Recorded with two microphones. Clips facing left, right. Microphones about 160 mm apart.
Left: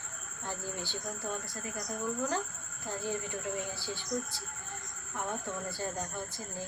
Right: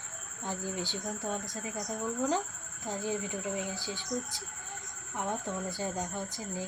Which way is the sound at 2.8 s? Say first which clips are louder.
Right 2 dB; 15° right (ahead or behind).